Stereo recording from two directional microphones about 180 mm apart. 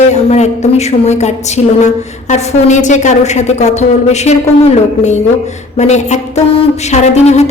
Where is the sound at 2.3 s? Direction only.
40° left (ahead or behind).